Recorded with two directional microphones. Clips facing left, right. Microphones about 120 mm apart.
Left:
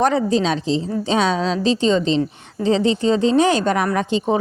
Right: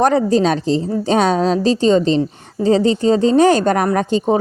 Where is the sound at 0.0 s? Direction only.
45° right (ahead or behind).